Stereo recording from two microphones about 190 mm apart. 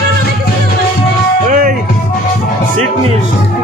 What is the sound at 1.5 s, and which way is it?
Music, 45° right (ahead or behind).